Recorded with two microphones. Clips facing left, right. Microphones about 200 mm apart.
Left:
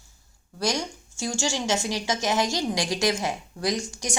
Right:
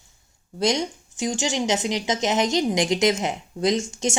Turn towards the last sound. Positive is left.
turn(degrees=-25)  # may be behind; listen again after turning